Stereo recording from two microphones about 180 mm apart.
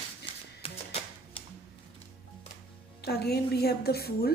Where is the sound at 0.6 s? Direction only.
30° left (ahead or behind).